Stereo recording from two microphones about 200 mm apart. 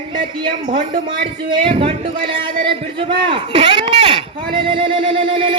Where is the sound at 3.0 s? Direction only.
25° right (ahead or behind).